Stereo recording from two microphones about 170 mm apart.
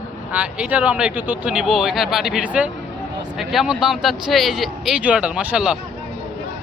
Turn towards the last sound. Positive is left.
turn(degrees=-5)  # may be behind; listen again after turning